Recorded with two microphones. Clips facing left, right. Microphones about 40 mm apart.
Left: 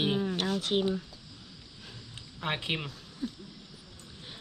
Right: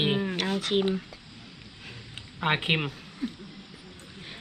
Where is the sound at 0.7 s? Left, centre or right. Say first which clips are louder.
Right 3 dB; right.